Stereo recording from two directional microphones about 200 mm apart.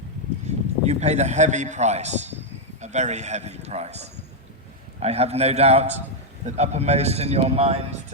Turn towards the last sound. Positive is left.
turn(degrees=-30)  # may be behind; listen again after turning